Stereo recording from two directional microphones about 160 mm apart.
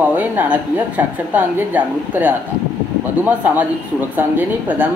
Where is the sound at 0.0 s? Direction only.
10° right (ahead or behind).